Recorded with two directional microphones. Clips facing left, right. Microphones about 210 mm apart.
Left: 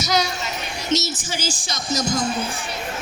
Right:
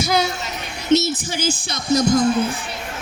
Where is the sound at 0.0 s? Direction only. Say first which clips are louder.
Right 3 dB; 55° right (ahead or behind).